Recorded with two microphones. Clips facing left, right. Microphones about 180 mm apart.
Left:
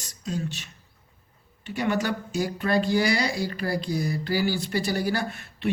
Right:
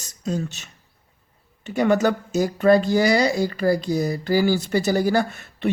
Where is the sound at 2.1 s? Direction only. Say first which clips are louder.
Right 5 dB; 45° right (ahead or behind).